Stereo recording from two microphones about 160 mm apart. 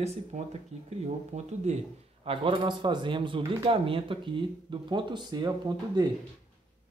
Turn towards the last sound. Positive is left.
turn(degrees=-25)  # may be behind; listen again after turning